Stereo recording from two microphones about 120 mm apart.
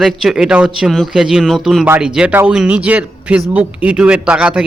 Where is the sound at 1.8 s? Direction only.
15° right (ahead or behind).